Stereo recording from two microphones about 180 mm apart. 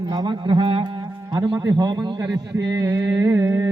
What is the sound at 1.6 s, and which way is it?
A man's voice, 20° right (ahead or behind).